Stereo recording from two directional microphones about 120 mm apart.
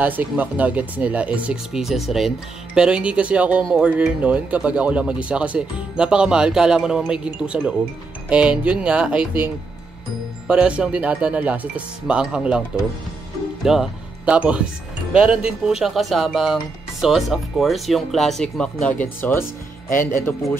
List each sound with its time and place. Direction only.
0.0 s speech: 15° right (ahead or behind); by 20.5 s 20° left (ahead or behind)